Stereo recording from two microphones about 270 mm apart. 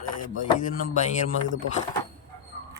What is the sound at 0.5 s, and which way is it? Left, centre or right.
Speech, left.